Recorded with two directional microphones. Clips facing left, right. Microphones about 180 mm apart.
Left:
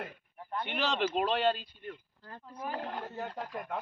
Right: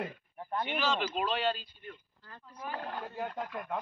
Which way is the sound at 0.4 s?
30° right (ahead or behind).